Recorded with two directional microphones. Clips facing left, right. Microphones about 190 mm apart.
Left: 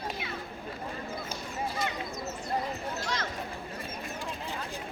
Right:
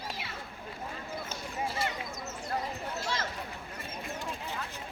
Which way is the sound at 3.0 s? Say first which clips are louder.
Right 1 dB; 5° right (ahead or behind).